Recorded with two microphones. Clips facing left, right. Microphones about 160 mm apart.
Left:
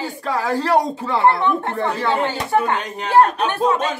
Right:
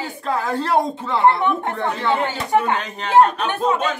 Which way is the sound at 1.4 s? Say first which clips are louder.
Left 1 dB; 15° right (ahead or behind).